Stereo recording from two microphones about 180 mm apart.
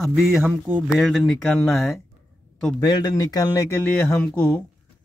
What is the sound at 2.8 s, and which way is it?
Speech, 20° left (ahead or behind).